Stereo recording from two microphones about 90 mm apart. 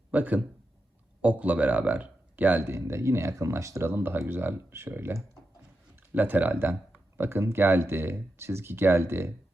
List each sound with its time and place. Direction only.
0.1 s speech: 20° right (ahead or behind)